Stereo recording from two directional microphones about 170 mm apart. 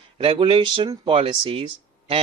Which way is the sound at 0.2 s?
35° right (ahead or behind).